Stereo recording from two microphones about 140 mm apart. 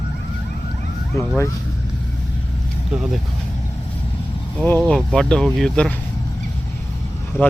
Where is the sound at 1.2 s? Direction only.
20° left (ahead or behind).